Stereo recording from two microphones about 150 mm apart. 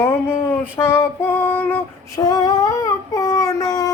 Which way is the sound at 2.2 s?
25° left (ahead or behind).